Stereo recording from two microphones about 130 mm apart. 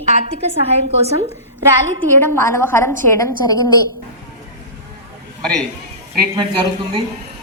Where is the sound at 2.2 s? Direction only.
20° left (ahead or behind).